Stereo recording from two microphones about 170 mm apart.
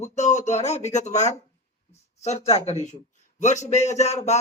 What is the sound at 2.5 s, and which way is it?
Speech, 40° left (ahead or behind).